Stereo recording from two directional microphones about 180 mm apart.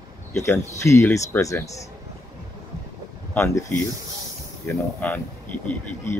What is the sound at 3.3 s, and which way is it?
Speech, 15° left (ahead or behind).